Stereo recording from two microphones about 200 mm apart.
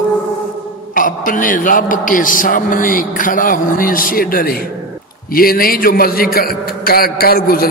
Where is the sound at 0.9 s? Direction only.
40° left (ahead or behind).